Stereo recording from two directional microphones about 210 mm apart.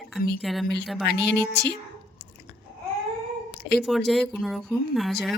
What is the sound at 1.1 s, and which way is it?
Speech, 55° left (ahead or behind).